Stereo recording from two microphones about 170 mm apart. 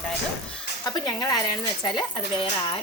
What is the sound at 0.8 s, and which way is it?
Speech, 25° left (ahead or behind).